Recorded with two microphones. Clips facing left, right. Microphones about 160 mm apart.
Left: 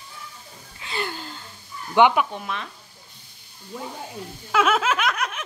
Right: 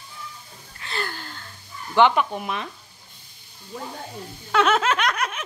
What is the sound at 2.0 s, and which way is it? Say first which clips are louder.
Speech: left 1 dB; 15° left (ahead or behind).